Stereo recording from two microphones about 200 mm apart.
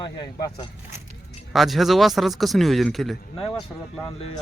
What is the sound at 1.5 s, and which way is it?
A man's voice, centre (ahead or behind).